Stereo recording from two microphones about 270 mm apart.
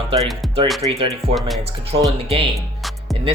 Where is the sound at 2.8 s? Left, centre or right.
Centre.